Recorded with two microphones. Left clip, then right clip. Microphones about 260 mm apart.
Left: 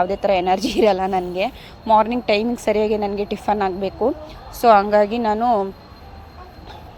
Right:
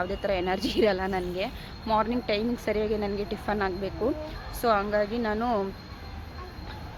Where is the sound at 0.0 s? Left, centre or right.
Left.